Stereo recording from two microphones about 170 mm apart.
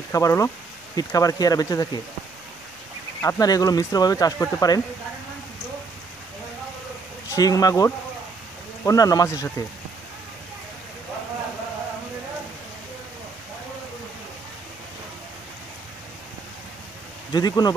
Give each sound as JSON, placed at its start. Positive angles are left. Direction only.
{"t": 0.1, "sound": "speech", "side_deg": 15}
{"t": 3.2, "sound": "speech", "side_deg": 20}
{"t": 7.2, "sound": "speech", "side_deg": 20}
{"t": 17.3, "sound": "speech", "side_deg": 25}